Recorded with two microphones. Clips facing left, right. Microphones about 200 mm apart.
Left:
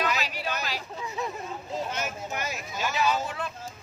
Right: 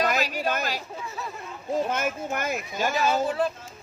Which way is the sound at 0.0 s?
45° right (ahead or behind).